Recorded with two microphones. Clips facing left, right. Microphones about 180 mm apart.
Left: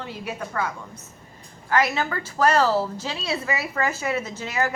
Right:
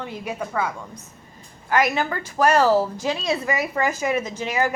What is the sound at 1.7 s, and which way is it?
A woman's voice, 15° right (ahead or behind).